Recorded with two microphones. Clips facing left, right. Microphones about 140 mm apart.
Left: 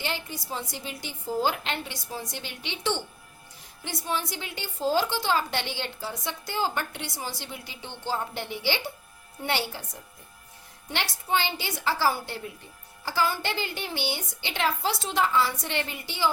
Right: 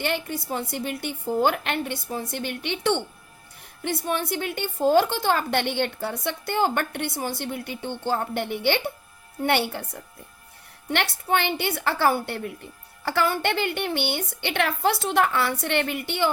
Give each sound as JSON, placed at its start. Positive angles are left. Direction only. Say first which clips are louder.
{"t": 0.0, "sound": "a woman's voice", "louder": "right 6 dB", "side_deg": -55}